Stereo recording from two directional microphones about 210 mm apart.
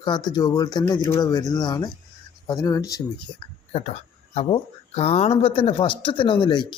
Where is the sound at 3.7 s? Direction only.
30° left (ahead or behind).